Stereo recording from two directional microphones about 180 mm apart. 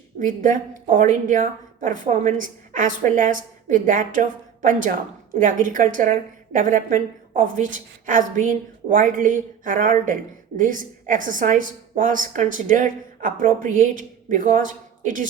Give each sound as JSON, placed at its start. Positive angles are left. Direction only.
{"t": 0.3, "sound": "a woman's voice", "side_deg": -45}